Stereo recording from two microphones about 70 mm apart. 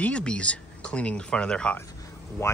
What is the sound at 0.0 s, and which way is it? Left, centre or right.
Speech, centre.